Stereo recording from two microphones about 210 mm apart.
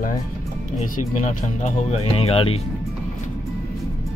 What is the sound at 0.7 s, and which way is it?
Speech, 35° left (ahead or behind).